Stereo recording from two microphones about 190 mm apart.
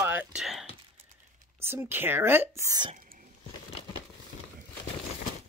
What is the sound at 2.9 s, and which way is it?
Whispering, 45° right (ahead or behind).